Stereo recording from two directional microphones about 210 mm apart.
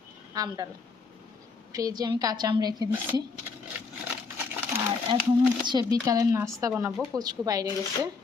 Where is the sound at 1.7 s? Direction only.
15° right (ahead or behind).